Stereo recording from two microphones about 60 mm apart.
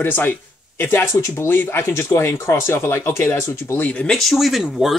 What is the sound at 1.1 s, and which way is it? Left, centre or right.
Speech, left.